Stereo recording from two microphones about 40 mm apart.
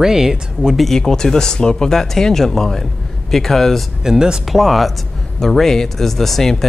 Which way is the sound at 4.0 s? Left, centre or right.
Centre.